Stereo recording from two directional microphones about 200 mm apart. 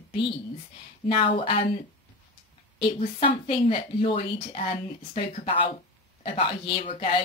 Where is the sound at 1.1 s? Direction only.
25° left (ahead or behind).